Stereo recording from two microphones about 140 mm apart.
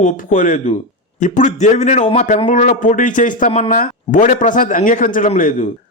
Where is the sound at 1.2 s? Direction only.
60° left (ahead or behind).